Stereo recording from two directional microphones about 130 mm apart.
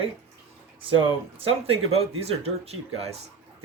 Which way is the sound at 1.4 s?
50° right (ahead or behind).